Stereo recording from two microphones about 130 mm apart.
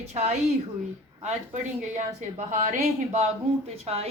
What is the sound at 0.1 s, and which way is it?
Speech, 60° right (ahead or behind).